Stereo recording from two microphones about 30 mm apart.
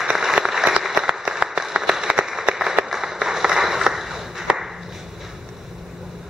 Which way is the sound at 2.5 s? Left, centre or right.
Centre.